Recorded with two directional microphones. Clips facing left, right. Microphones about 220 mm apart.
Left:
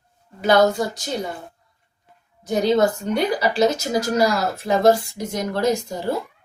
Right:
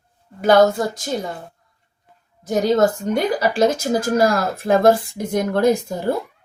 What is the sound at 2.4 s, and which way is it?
A woman's voice, 50° right (ahead or behind).